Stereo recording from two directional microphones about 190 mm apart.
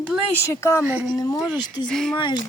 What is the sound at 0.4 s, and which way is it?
Speech, 15° left (ahead or behind).